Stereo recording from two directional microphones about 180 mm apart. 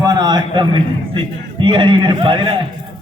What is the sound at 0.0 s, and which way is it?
A man's voice, 20° right (ahead or behind).